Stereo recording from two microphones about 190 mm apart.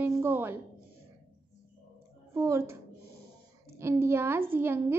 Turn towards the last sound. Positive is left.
turn(degrees=-10)  # may be behind; listen again after turning